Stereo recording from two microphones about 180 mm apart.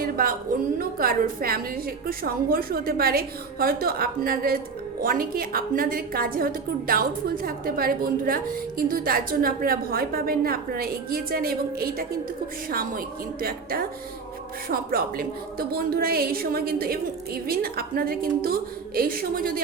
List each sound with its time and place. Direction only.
0.0 s a woman's voice: 50° right (ahead or behind)